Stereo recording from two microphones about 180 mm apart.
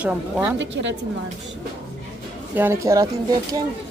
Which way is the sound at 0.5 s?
90° right.